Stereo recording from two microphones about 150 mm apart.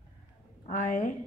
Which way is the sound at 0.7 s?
55° left (ahead or behind).